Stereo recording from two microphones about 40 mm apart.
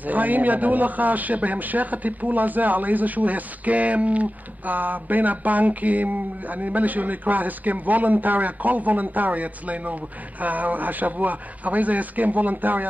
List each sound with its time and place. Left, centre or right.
0.0 s a man's voice: right